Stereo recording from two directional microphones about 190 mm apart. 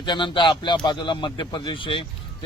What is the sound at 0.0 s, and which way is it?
Speech, 25° left (ahead or behind).